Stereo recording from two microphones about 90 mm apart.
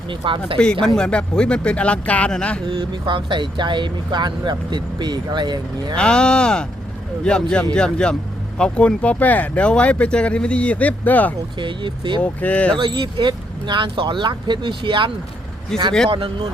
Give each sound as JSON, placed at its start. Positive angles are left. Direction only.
{"t": 0.1, "sound": "speech", "side_deg": -80}
{"t": 0.6, "sound": "speech", "side_deg": 10}
{"t": 2.6, "sound": "speech", "side_deg": -55}
{"t": 6.0, "sound": "speech", "side_deg": 10}
{"t": 11.5, "sound": "speech", "side_deg": -60}
{"t": 12.2, "sound": "speech", "side_deg": 15}
{"t": 12.8, "sound": "speech", "side_deg": -60}
{"t": 15.7, "sound": "a man's voice", "side_deg": 5}
{"t": 16.0, "sound": "a man's voice", "side_deg": -65}